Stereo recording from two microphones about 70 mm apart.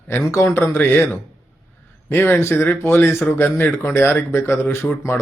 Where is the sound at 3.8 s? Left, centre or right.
Left.